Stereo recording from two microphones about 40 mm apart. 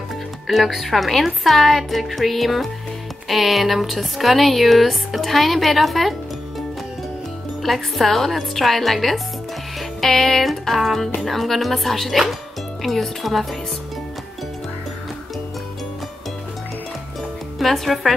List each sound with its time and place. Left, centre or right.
0.5 s speech: centre
7.6 s speech: centre
9.8 s music: centre
11.1 s speech: centre
17.6 s speech: centre